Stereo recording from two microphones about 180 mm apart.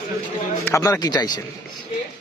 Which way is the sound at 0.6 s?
15° left (ahead or behind).